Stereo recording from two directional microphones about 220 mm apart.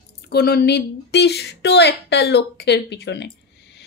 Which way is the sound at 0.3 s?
45° left (ahead or behind).